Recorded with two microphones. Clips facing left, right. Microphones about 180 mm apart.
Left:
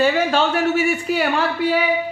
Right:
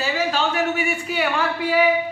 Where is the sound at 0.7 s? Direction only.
40° left (ahead or behind).